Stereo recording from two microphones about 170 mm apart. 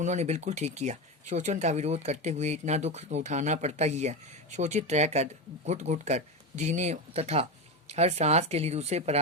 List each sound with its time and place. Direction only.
0.0 s speech: 45° right (ahead or behind)